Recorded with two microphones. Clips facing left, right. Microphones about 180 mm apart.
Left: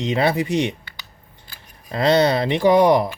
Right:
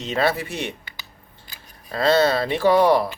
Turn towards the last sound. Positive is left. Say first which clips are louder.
# left 2 dB
turn(degrees=15)  # may be behind; listen again after turning